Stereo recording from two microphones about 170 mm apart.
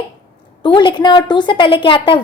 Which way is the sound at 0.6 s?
30° left (ahead or behind).